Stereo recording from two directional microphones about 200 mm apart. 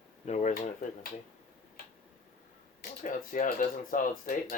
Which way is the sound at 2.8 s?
40° left (ahead or behind).